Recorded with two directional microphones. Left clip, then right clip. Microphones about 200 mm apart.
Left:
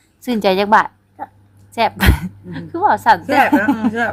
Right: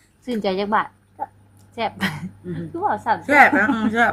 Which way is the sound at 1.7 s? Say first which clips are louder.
Left 8 dB; 40° left (ahead or behind).